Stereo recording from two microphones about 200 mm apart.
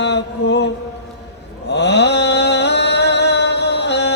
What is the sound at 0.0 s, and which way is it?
Mantra, 60° left (ahead or behind).